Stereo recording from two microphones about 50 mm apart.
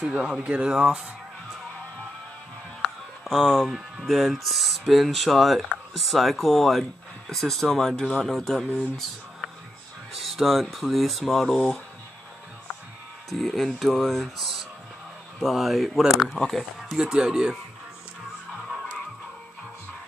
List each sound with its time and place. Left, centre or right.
0.0 s speech: centre
3.3 s speech: centre
13.3 s speech: centre
16.4 s speech: centre
17.0 s speech: centre